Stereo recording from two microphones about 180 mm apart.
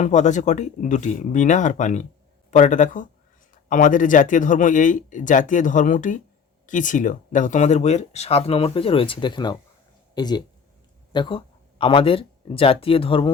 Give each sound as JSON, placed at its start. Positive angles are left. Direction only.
{"t": 0.0, "sound": "speech", "side_deg": 40}